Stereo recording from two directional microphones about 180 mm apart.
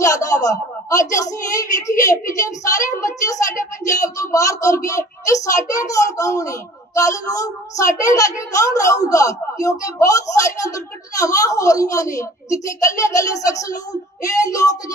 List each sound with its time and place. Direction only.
0.0 s speech: 20° left (ahead or behind)